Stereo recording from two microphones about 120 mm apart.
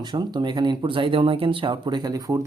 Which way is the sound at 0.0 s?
35° right (ahead or behind).